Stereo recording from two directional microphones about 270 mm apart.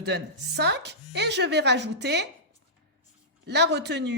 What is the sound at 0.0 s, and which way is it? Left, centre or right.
Speech, right.